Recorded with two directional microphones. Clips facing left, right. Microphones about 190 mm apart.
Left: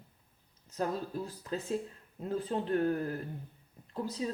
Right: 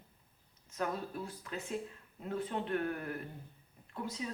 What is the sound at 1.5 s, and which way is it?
Speech, 35° left (ahead or behind).